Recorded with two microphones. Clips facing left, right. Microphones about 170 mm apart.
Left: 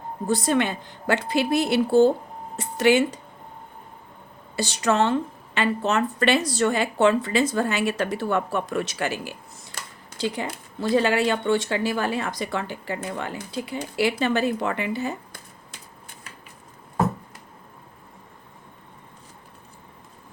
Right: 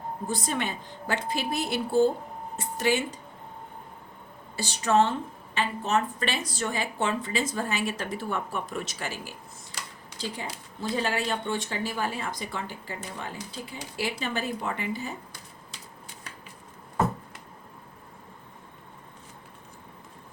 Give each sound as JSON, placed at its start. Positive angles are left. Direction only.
{"t": 0.3, "sound": "speech", "side_deg": 75}
{"t": 4.5, "sound": "speech", "side_deg": 75}
{"t": 9.7, "sound": "a sound", "side_deg": 55}
{"t": 10.2, "sound": "speech", "side_deg": 75}
{"t": 15.3, "sound": "typewriter", "side_deg": 50}